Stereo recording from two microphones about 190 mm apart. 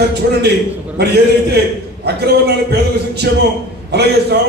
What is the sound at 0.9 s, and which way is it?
A man's voice, 60° right (ahead or behind).